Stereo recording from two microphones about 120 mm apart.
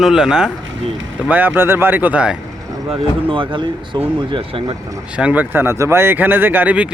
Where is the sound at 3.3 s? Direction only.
45° right (ahead or behind).